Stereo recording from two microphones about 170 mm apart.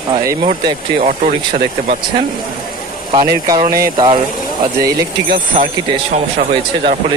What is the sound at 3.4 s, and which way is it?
Speech, 20° right (ahead or behind).